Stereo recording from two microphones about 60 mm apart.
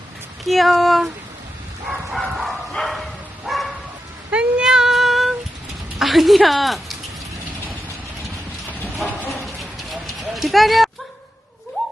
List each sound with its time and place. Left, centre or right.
0.4 s a woman's voice: centre
2.1 s bow-wow: centre
4.3 s child singing: centre
4.6 s female singing: centre
6.0 s a woman's voice: centre
9.0 s clip-clop: centre